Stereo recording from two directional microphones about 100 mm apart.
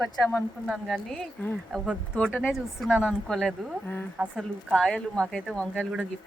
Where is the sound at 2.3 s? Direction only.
10° right (ahead or behind).